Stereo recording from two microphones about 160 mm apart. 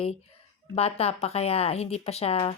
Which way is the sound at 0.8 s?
40° left (ahead or behind).